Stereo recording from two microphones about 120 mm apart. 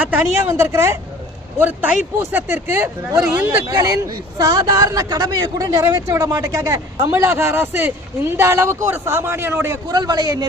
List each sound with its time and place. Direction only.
0.0 s speech: 15° right (ahead or behind)
3.7 s speech: 35° right (ahead or behind)
9.9 s a man's voice: 35° right (ahead or behind)